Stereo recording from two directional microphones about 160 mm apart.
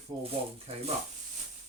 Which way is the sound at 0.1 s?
20° right (ahead or behind).